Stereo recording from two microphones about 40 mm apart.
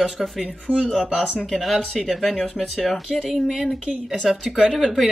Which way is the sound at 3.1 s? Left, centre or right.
Centre.